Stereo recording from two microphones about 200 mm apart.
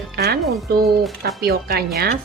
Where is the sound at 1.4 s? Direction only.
50° right (ahead or behind).